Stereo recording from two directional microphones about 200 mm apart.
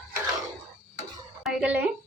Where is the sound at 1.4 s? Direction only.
10° right (ahead or behind).